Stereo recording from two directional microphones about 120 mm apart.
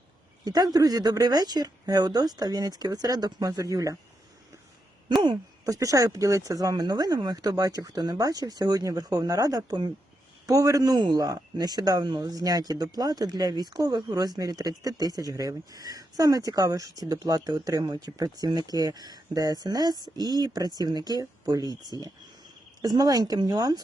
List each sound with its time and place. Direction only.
0.4 s speech: 35° right (ahead or behind)
5.0 s speech: 40° right (ahead or behind)